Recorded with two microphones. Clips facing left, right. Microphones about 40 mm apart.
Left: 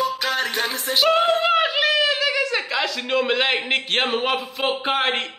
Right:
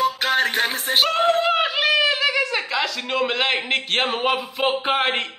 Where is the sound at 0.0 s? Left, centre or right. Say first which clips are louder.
Right 3 dB; right.